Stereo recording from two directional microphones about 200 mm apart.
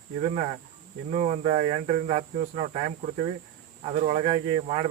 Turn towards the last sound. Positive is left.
turn(degrees=-30)  # may be behind; listen again after turning